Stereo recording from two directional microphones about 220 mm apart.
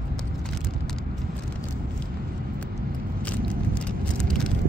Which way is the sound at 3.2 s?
5° left (ahead or behind).